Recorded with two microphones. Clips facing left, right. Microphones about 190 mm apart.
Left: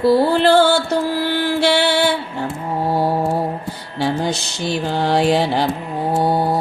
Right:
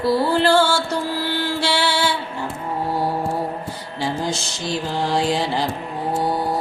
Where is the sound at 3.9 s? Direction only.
65° left (ahead or behind).